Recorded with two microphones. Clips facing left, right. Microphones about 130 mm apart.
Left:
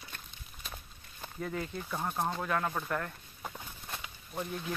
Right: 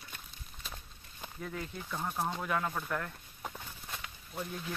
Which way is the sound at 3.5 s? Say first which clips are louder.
Left 1 dB; 10° left (ahead or behind).